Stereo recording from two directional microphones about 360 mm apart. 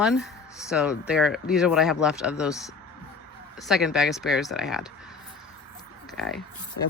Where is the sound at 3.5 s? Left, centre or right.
Centre.